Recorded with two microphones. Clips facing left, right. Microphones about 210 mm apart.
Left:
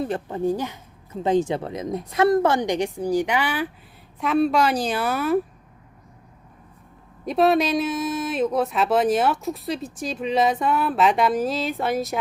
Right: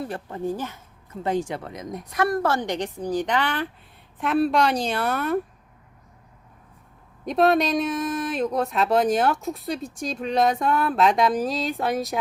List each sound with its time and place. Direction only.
0.0 s a woman's voice: 20° left (ahead or behind)
7.3 s speech: centre (ahead or behind)